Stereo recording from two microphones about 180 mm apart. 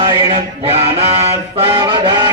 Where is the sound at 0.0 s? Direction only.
25° right (ahead or behind).